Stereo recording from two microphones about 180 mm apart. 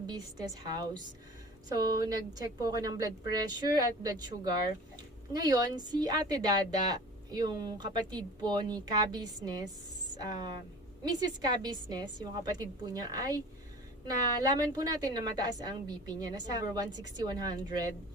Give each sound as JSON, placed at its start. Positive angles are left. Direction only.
{"t": 0.1, "sound": "a woman's voice", "side_deg": -25}
{"t": 11.0, "sound": "a woman's voice", "side_deg": -20}